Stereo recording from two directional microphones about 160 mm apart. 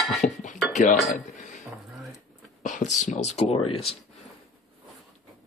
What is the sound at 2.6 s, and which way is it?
Speech, 50° left (ahead or behind).